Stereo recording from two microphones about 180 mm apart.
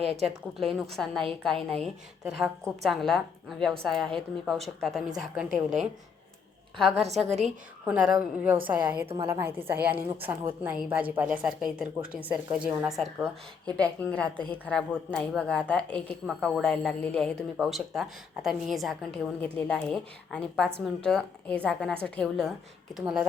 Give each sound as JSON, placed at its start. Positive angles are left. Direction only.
{"t": 0.2, "sound": "a woman's voice", "side_deg": 0}
{"t": 13.7, "sound": "a woman's voice", "side_deg": 5}